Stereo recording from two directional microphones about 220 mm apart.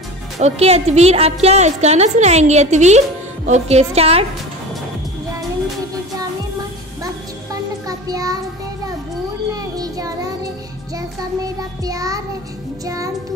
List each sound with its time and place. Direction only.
0.4 s a woman's voice: 30° right (ahead or behind)
8.1 s child singing: 15° right (ahead or behind)
9.5 s child singing: 15° right (ahead or behind)
12.8 s music: 15° right (ahead or behind)